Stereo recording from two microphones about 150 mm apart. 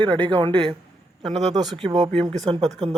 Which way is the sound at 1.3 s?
50° right (ahead or behind).